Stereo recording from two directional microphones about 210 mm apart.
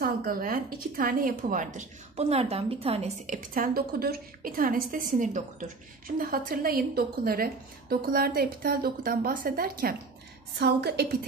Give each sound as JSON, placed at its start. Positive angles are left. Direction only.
{"t": 0.0, "sound": "a woman's voice", "side_deg": -40}